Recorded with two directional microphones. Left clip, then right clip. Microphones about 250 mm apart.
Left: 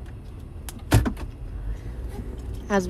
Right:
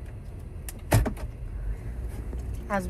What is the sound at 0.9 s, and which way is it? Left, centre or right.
Vehicle, centre.